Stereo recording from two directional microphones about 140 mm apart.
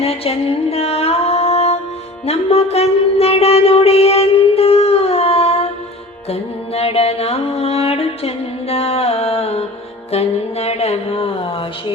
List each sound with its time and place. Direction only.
0.0 s music: 45° left (ahead or behind)